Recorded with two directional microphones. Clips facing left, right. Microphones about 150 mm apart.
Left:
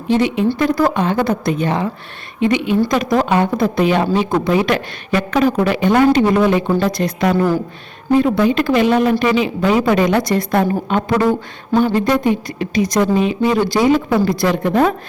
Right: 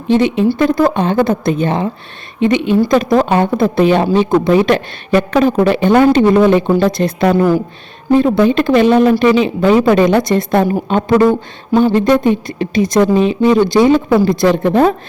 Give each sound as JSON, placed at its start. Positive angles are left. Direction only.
{"t": 0.1, "sound": "a woman's voice", "side_deg": -25}